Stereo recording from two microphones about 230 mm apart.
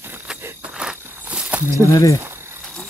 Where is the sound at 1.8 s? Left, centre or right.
Centre.